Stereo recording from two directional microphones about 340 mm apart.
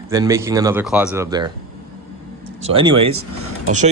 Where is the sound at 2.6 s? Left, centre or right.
Centre.